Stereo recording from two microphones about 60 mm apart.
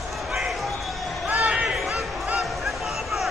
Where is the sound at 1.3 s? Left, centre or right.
Right.